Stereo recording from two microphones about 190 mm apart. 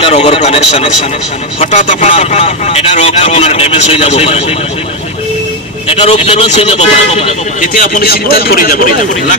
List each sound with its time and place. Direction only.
0.0 s a man's voice: 30° left (ahead or behind)
5.9 s a man's voice: 30° left (ahead or behind)